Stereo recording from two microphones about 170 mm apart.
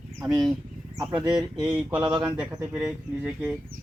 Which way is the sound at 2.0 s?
25° right (ahead or behind).